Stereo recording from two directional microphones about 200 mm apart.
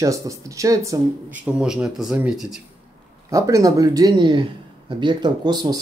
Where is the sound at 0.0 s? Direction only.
15° right (ahead or behind).